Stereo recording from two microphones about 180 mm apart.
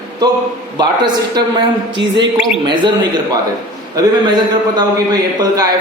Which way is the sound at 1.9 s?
85° right.